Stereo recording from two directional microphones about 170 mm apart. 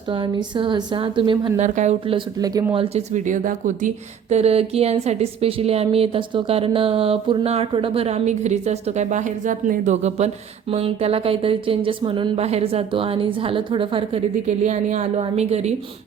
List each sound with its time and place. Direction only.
0.1 s a woman's voice: 30° right (ahead or behind)
1.5 s speech: 45° right (ahead or behind)
2.4 s a woman's voice: 20° right (ahead or behind)
2.7 s speech: 40° right (ahead or behind)
14.4 s speech: 45° right (ahead or behind)